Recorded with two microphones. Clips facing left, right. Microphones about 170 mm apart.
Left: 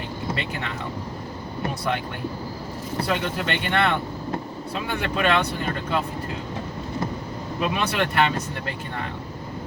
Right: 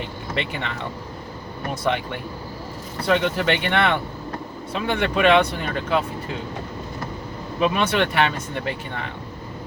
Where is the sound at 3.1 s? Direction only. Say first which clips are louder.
Right 7 dB; 70° right (ahead or behind).